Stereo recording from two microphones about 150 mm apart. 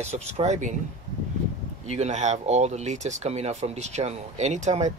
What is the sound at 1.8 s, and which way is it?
Speech, 45° right (ahead or behind).